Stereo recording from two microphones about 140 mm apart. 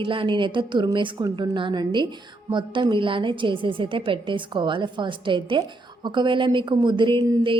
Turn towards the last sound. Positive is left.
turn(degrees=-35)  # may be behind; listen again after turning